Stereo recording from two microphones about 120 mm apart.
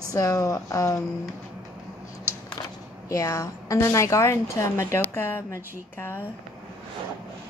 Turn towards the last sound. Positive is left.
turn(degrees=20)  # may be behind; listen again after turning